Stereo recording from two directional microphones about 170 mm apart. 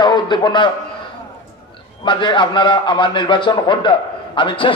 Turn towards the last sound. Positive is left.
turn(degrees=30)  # may be behind; listen again after turning